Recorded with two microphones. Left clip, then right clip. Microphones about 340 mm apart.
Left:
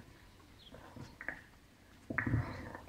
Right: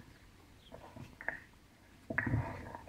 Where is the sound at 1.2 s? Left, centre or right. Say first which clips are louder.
Right 3 dB; right.